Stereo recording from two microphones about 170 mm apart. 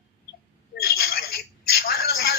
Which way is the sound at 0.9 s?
65° left (ahead or behind).